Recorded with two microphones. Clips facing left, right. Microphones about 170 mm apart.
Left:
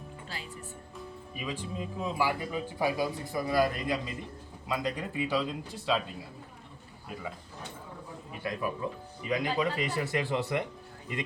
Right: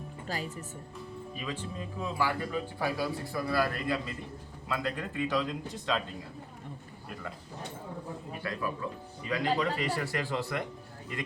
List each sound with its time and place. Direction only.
0.3 s speech: 45° right (ahead or behind)
0.9 s speech: 10° left (ahead or behind)
8.4 s speech: 20° left (ahead or behind)